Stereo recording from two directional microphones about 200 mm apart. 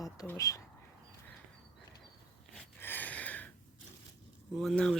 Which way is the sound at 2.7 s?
10° left (ahead or behind).